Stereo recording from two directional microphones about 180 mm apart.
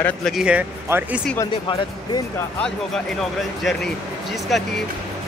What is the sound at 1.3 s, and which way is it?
Speech, 20° left (ahead or behind).